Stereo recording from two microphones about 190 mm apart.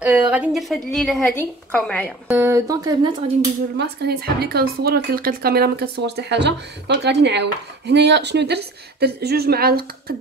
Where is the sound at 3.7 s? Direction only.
55° right (ahead or behind).